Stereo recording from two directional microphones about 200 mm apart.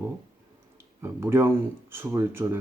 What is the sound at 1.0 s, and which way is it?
Speech, 10° right (ahead or behind).